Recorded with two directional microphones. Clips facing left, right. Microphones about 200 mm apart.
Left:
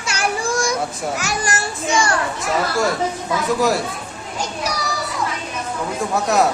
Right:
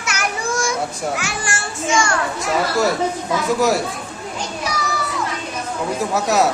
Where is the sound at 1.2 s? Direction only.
40° left (ahead or behind).